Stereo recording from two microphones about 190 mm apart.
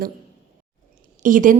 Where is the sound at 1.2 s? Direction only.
45° right (ahead or behind).